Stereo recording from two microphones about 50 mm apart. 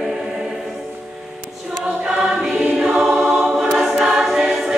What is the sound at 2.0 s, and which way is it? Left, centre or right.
Choir, centre.